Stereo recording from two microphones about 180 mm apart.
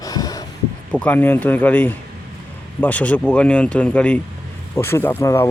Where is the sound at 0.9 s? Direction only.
10° left (ahead or behind).